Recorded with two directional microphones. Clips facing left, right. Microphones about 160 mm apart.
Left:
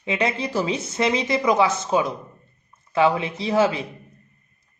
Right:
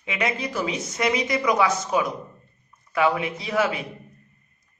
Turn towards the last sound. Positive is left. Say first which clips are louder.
# left 4 dB
turn(degrees=30)  # may be behind; listen again after turning